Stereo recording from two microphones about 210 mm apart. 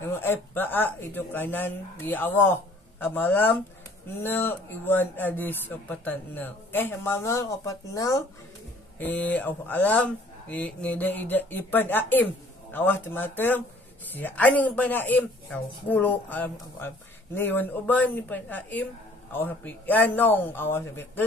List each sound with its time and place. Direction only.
0.0 s a woman's voice: 10° left (ahead or behind)